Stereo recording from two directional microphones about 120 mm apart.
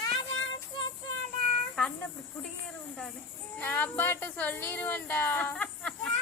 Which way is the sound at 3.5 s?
15° left (ahead or behind).